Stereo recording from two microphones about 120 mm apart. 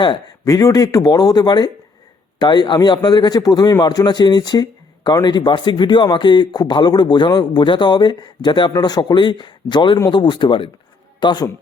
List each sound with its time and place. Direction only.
0.0 s speech: 40° left (ahead or behind)